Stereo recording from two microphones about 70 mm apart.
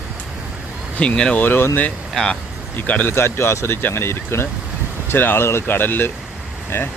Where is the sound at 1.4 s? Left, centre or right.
Left.